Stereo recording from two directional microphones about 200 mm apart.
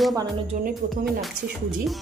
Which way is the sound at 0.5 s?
35° right (ahead or behind).